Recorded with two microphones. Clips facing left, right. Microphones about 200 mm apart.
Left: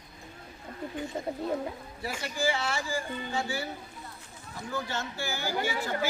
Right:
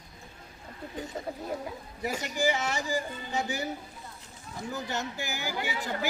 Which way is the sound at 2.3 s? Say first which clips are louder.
Right 1 dB; 20° right (ahead or behind).